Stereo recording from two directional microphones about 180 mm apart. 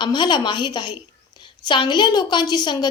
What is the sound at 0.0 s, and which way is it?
A woman's voice, 25° left (ahead or behind).